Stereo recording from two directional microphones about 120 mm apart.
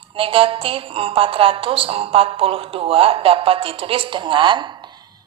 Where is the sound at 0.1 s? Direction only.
50° right (ahead or behind).